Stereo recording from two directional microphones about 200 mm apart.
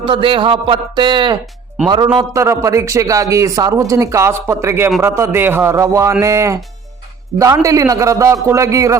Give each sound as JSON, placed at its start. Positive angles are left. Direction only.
{"t": 0.0, "sound": "a man's voice", "side_deg": -25}